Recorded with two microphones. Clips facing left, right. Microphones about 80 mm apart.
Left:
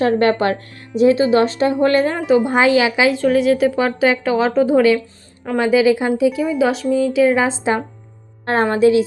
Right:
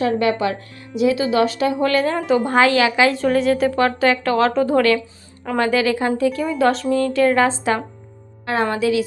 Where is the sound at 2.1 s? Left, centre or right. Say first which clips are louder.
Left 2 dB; centre.